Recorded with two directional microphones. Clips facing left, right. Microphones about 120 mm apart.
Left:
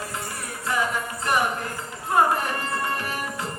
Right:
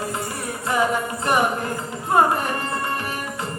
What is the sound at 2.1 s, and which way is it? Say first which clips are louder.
Music: right 3 dB; 25° right (ahead or behind).